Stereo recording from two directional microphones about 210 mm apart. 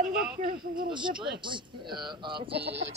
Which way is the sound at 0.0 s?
Centre (ahead or behind).